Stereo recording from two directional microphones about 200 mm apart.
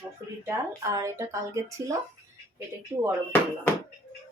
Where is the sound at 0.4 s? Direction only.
15° right (ahead or behind).